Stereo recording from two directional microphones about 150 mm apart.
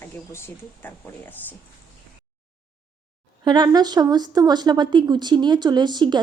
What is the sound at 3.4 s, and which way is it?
Speech, 30° right (ahead or behind).